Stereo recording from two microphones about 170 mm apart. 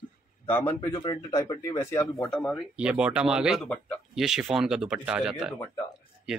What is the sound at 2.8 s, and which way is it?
Speech, 5° right (ahead or behind).